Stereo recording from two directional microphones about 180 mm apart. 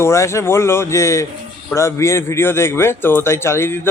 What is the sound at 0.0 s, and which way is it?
A man's voice, 15° left (ahead or behind).